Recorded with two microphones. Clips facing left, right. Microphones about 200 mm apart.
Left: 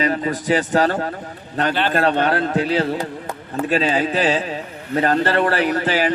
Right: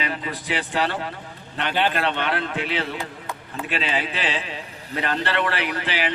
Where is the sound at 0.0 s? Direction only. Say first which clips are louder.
Left 9 dB; 45° left (ahead or behind).